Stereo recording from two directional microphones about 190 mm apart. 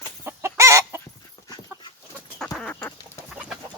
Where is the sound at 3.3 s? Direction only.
5° right (ahead or behind).